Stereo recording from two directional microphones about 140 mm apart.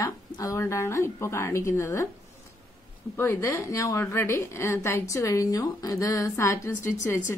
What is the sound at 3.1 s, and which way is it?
A woman's voice, 15° left (ahead or behind).